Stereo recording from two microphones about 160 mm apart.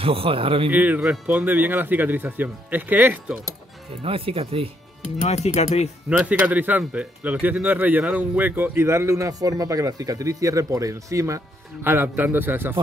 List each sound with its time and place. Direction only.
0.0 s speech: 35° right (ahead or behind)
0.7 s speech: 10° right (ahead or behind)
4.0 s speech: 35° right (ahead or behind)
5.2 s speech: 40° left (ahead or behind)
6.0 s speech: 5° right (ahead or behind)